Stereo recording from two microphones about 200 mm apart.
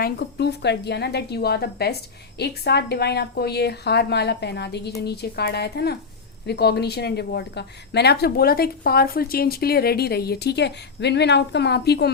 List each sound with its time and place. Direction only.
0.0 s a woman's voice: 55° left (ahead or behind)